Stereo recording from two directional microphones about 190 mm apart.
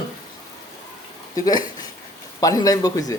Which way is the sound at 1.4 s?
20° left (ahead or behind).